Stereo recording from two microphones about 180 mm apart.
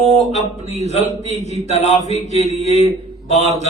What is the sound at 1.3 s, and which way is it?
Mantra, 40° left (ahead or behind).